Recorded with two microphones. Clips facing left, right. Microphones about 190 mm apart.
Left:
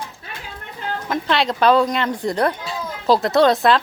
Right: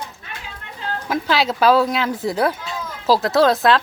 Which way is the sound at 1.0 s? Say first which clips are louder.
Right 1 dB; 5° right (ahead or behind).